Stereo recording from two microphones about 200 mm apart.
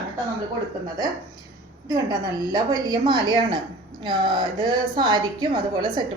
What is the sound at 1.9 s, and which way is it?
A woman's voice, 20° right (ahead or behind).